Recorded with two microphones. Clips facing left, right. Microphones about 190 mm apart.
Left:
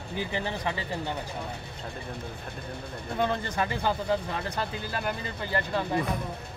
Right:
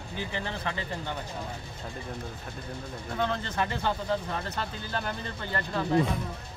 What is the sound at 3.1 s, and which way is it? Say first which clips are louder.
Speech: left 2 dB; 10° left (ahead or behind).